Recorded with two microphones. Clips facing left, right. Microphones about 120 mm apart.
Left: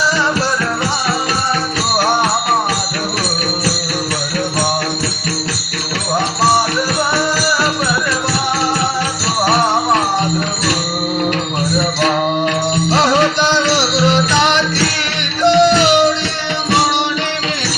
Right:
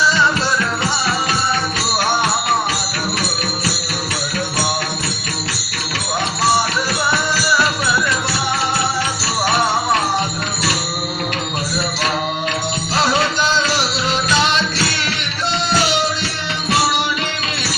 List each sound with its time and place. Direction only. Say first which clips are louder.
12.9 s music: left 4 dB; 75° left (ahead or behind)